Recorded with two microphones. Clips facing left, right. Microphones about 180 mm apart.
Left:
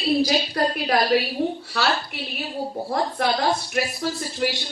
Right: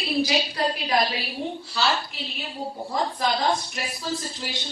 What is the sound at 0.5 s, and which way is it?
Speech, 55° left (ahead or behind).